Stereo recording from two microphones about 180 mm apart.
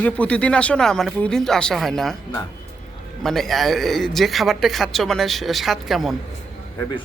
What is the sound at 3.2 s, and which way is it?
Speech, centre (ahead or behind).